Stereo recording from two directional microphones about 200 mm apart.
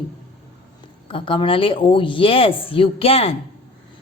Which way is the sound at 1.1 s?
25° left (ahead or behind).